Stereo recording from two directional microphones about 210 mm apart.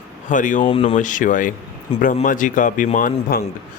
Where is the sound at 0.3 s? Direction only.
35° left (ahead or behind).